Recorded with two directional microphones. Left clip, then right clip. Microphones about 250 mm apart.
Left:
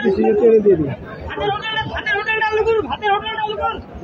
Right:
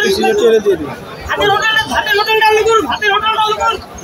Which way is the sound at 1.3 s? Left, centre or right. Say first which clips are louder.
Right 9 dB; right.